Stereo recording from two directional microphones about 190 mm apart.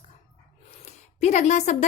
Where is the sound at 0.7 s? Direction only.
35° left (ahead or behind).